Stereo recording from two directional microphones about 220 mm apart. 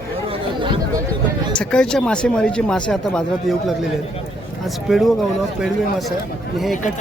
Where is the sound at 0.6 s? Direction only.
20° right (ahead or behind).